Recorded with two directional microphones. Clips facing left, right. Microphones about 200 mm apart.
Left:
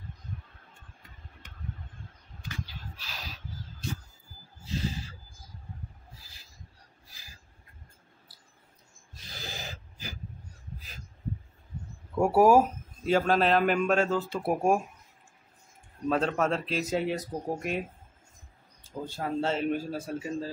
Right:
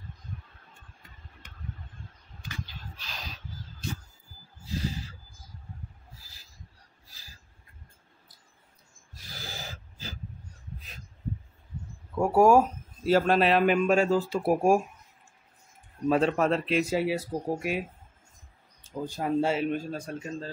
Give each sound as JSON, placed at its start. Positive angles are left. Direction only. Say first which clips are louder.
{"t": 2.6, "sound": "a sound", "louder": "even", "side_deg": 5}
{"t": 9.3, "sound": "a sound", "louder": "even", "side_deg": 20}
{"t": 12.2, "sound": "a man's voice", "louder": "even", "side_deg": 5}
{"t": 13.0, "sound": "a man's voice", "louder": "right 2 dB", "side_deg": -5}
{"t": 16.1, "sound": "a man's voice", "louder": "right 3 dB", "side_deg": -5}
{"t": 19.0, "sound": "speech", "louder": "right 4 dB", "side_deg": -15}
{"t": 19.7, "sound": "a man's voice", "louder": "left 1 dB", "side_deg": 5}